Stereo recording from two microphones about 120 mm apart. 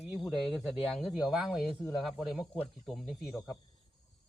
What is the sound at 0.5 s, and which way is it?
Speech, centre (ahead or behind).